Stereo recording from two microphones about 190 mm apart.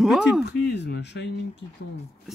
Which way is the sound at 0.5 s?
60° left (ahead or behind).